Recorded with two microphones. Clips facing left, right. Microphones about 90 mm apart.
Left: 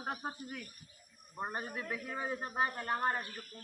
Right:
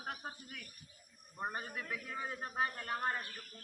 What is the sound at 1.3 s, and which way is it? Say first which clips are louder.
A man's voice: left 2 dB; 25° left (ahead or behind).